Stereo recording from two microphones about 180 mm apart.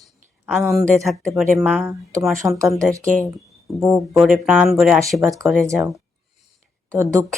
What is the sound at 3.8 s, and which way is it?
Speech, centre (ahead or behind).